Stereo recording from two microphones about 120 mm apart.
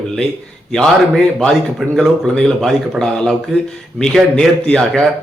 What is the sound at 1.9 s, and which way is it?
A man's voice, 5° left (ahead or behind).